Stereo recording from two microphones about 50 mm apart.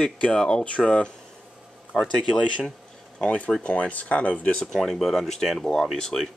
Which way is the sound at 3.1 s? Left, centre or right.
Left.